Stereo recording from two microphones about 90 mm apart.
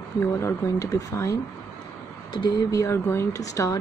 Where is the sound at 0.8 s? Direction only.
40° left (ahead or behind).